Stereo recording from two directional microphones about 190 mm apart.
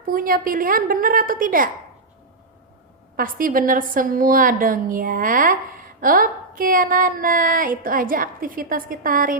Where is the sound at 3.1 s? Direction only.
45° right (ahead or behind).